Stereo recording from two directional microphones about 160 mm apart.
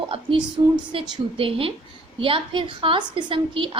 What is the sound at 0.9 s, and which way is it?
A woman's voice, 35° right (ahead or behind).